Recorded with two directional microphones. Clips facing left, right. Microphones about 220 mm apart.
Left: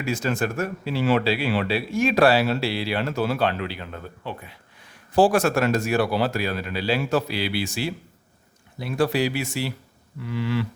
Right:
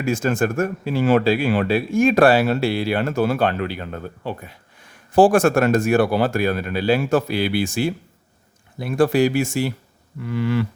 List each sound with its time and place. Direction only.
0.0 s speech: 50° right (ahead or behind)